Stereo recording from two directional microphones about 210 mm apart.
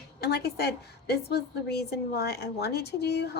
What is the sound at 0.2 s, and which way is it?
A woman's voice, 50° left (ahead or behind).